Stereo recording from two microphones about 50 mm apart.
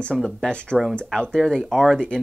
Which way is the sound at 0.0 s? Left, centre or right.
Centre.